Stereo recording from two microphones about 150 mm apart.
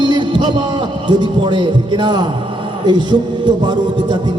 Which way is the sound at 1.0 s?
30° right (ahead or behind).